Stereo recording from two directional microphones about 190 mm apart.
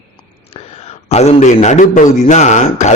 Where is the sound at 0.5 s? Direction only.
35° left (ahead or behind).